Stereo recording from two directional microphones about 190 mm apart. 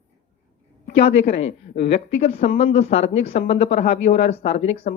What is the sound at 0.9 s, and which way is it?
Speech, 35° left (ahead or behind).